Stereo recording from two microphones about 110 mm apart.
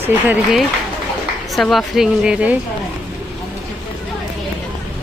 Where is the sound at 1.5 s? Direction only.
Centre (ahead or behind).